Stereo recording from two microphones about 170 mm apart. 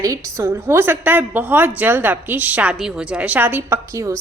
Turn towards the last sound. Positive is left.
turn(degrees=-20)  # may be behind; listen again after turning